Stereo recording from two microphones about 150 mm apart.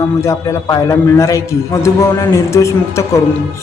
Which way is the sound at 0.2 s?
20° left (ahead or behind).